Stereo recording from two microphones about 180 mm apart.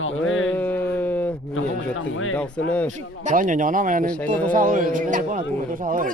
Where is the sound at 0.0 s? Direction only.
90° left.